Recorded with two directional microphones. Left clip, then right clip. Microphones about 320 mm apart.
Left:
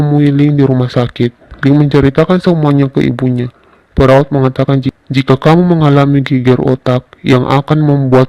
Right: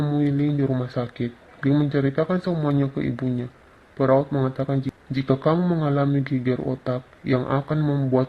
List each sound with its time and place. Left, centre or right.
0.0 s speech: left